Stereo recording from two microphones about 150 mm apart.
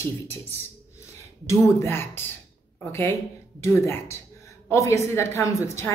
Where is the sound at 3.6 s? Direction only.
20° left (ahead or behind).